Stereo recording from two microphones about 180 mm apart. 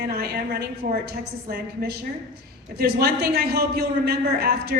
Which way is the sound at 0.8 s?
45° right (ahead or behind).